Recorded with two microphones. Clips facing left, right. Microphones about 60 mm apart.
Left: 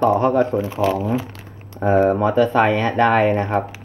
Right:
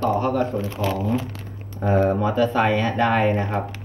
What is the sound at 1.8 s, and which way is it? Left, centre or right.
Speech, left.